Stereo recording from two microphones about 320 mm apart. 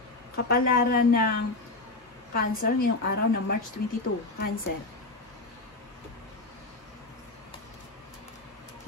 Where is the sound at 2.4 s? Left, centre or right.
Left.